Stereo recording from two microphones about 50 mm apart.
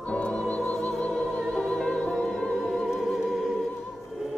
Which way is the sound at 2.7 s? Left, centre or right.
Centre.